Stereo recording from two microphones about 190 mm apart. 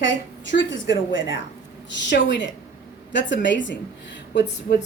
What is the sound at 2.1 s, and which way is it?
Speech, 65° left (ahead or behind).